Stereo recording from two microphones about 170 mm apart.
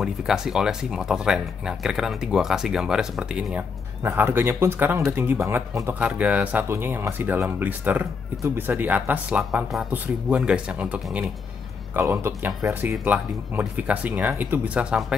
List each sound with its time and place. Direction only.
0.0 s speech: 5° right (ahead or behind)